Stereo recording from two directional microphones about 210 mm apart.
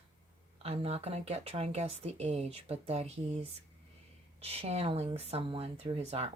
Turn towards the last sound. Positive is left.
turn(degrees=-30)  # may be behind; listen again after turning